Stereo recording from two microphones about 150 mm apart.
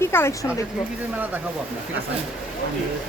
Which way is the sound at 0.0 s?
15° left (ahead or behind).